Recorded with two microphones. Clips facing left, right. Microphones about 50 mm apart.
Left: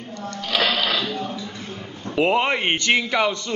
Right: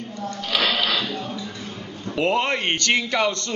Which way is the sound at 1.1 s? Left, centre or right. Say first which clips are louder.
Left 2 dB; left.